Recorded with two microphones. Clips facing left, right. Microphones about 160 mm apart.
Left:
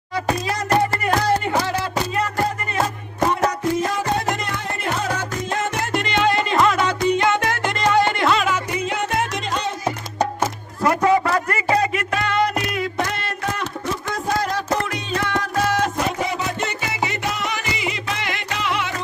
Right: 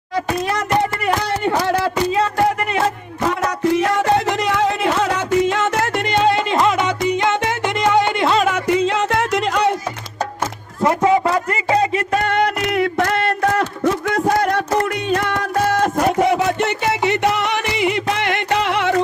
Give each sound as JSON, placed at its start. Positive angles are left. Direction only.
{"t": 1.3, "sound": "music", "side_deg": -60}
{"t": 3.2, "sound": "music", "side_deg": -85}
{"t": 6.2, "sound": "music", "side_deg": -20}
{"t": 8.5, "sound": "music", "side_deg": -80}
{"t": 10.8, "sound": "a sound", "side_deg": -20}
{"t": 12.2, "sound": "a sound", "side_deg": -60}